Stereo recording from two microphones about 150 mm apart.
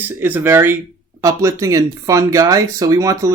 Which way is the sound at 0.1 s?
15° right (ahead or behind).